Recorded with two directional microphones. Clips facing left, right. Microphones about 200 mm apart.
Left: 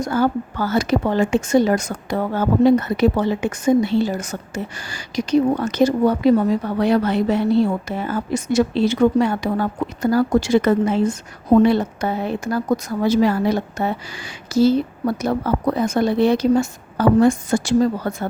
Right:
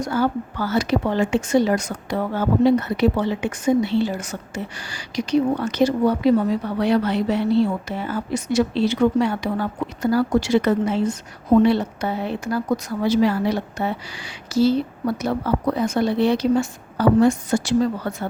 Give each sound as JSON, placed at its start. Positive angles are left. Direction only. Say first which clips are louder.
{"t": 0.0, "sound": "speech", "louder": "left 2 dB", "side_deg": 45}